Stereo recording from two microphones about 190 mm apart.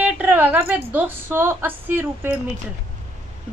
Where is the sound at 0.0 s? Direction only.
10° right (ahead or behind).